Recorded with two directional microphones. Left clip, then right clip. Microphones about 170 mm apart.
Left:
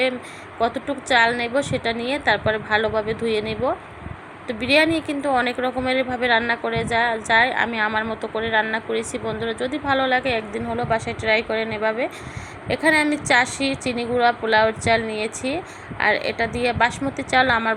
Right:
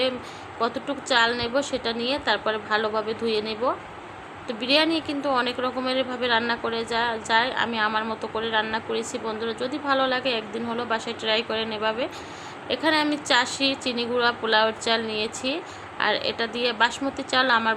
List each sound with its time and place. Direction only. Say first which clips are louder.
0.6 s a woman's voice: left 4 dB; 15° left (ahead or behind)